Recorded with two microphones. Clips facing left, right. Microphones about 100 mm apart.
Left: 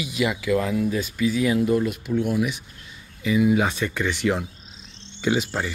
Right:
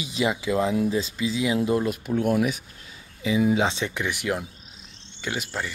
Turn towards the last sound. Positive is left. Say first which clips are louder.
# left 7 dB
turn(degrees=5)  # may be behind; listen again after turning